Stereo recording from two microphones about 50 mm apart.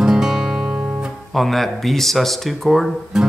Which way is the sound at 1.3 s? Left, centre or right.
Centre.